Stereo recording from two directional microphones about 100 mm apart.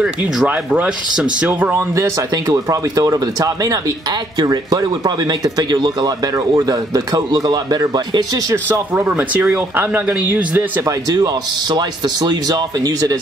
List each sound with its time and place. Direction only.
0.0 s speech: 5° right (ahead or behind)
1.5 s speech: 20° right (ahead or behind)
2.3 s speech: 40° right (ahead or behind)
8.7 s speech: 20° right (ahead or behind)
11.7 s speech: 45° right (ahead or behind)